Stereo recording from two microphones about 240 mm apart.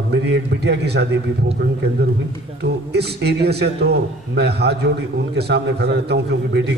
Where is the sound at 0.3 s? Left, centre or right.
Right.